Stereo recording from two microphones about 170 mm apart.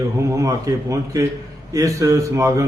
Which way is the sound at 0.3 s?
20° right (ahead or behind).